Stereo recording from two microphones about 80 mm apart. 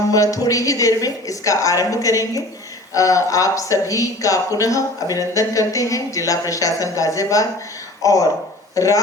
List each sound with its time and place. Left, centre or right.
0.1 s speech: left